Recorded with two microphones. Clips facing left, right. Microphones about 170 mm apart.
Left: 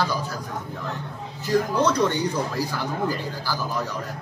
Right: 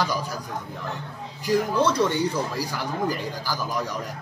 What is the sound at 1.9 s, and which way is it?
Speech, 10° right (ahead or behind).